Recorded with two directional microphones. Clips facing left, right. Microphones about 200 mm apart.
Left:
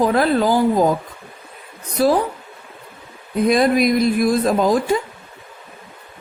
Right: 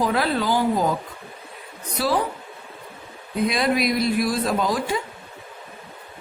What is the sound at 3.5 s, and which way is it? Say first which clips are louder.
Speech: left 8 dB; 50° left (ahead or behind).